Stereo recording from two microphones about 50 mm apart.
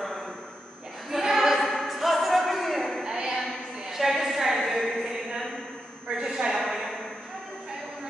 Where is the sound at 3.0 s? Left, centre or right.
Centre.